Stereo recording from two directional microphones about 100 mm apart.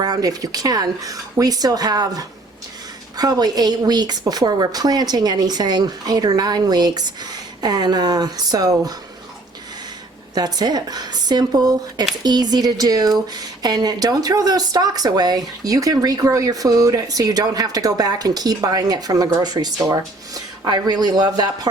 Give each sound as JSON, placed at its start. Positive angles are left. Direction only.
{"t": 0.0, "sound": "speech", "side_deg": -40}
{"t": 10.3, "sound": "speech", "side_deg": -45}